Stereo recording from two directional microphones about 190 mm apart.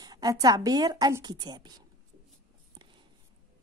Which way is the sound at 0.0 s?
20° right (ahead or behind).